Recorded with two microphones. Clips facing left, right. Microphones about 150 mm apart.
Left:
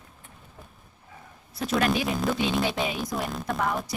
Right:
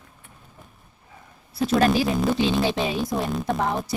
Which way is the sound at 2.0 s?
Centre (ahead or behind).